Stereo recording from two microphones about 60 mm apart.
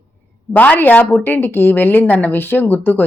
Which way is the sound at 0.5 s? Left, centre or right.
Left.